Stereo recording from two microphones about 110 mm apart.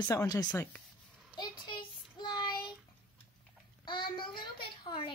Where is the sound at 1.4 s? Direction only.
45° left (ahead or behind).